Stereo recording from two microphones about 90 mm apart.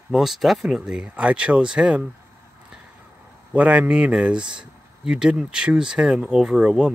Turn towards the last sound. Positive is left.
turn(degrees=-10)  # may be behind; listen again after turning